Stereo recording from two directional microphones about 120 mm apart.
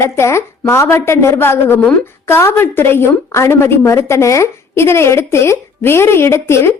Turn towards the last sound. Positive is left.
turn(degrees=20)  # may be behind; listen again after turning